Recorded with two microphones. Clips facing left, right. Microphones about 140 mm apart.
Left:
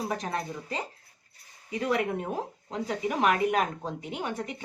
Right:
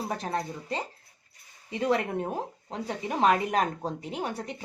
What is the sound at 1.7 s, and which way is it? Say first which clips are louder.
Speech: right 1 dB; 30° right (ahead or behind).